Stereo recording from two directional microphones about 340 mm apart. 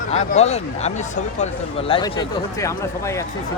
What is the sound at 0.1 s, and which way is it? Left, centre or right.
Speech, centre.